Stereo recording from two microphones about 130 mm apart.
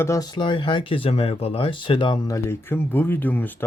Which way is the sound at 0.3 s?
40° left (ahead or behind).